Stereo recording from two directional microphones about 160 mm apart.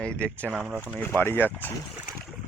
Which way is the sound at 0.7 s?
5° right (ahead or behind).